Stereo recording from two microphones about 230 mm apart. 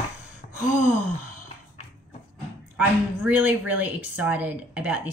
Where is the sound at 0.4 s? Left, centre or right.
Left.